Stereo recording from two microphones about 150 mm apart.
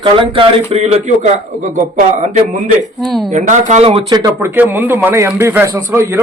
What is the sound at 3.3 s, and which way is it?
Speech, 55° right (ahead or behind).